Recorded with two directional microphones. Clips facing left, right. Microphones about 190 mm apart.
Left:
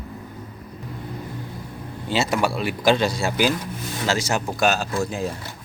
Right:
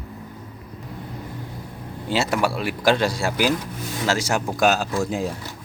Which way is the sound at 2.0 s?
10° right (ahead or behind).